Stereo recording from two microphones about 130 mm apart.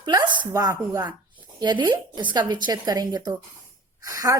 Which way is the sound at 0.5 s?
25° right (ahead or behind).